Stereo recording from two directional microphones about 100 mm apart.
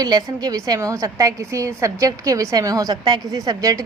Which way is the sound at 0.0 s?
40° right (ahead or behind).